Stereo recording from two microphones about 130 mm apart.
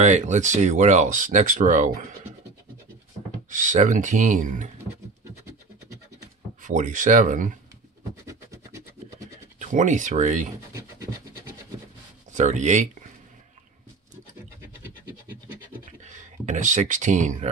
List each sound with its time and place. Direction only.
0.0 s speech: 65° right (ahead or behind)
3.4 s speech: 80° right
6.6 s speech: 80° right
8.3 s scratch: 25° right (ahead or behind)
9.6 s speech: 75° right (ahead or behind)
10.7 s wood: 20° right (ahead or behind)
12.3 s speech: 70° right (ahead or behind)
14.8 s scratch: 15° right (ahead or behind)
16.0 s speech: 70° right (ahead or behind)